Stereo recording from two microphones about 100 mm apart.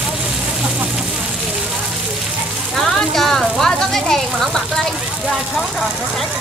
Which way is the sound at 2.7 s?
Centre (ahead or behind).